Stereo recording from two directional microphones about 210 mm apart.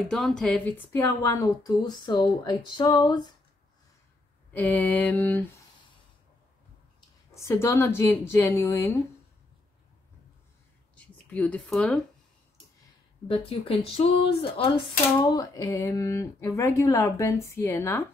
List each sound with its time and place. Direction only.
0.1 s a woman's voice: centre (ahead or behind); by 3.3 s 20° left (ahead or behind)
4.6 s a woman's voice: 10° left (ahead or behind)
7.3 s a woman's voice: 15° left (ahead or behind)
11.2 s speech: 5° left (ahead or behind)
13.3 s a woman's voice: 25° left (ahead or behind); by 18.0 s 10° left (ahead or behind)